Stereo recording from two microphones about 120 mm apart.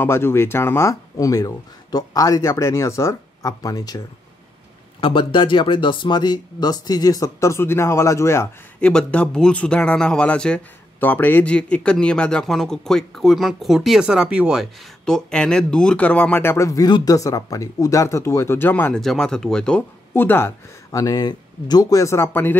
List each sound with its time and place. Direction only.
0.0 s speech: 20° left (ahead or behind)
5.0 s speech: 45° left (ahead or behind); by 8.5 s 25° left (ahead or behind)
8.8 s speech: 10° left (ahead or behind)
18.9 s speech: 5° left (ahead or behind)
20.2 s speech: 20° left (ahead or behind)